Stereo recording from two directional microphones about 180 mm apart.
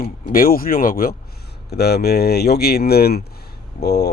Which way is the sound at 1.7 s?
60° left (ahead or behind).